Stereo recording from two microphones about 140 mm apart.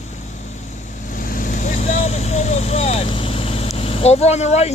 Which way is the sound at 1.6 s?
60° left (ahead or behind).